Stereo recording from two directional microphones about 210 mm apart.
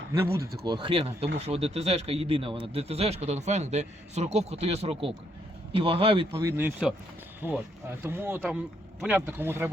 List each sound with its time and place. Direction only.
0.1 s speech: 15° right (ahead or behind)